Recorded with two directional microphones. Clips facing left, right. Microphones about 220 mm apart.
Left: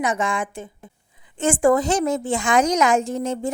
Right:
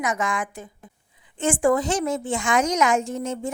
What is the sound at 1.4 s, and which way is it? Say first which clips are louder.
A woman's voice: left 3 dB; 40° left (ahead or behind).